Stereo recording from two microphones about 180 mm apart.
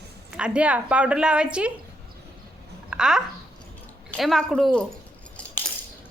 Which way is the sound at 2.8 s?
5° right (ahead or behind).